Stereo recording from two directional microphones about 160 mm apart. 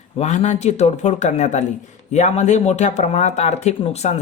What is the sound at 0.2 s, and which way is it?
Speech, 45° left (ahead or behind).